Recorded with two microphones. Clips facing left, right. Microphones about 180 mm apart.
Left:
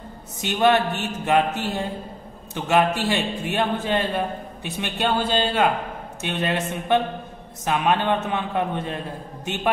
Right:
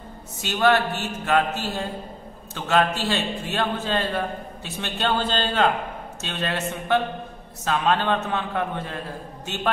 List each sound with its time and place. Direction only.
0.4 s a man's voice: 20° left (ahead or behind)